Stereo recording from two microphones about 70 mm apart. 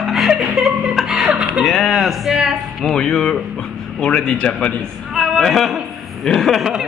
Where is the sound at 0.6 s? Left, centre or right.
Centre.